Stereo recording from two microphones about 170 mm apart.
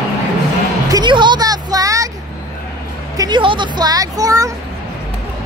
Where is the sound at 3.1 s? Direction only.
25° right (ahead or behind).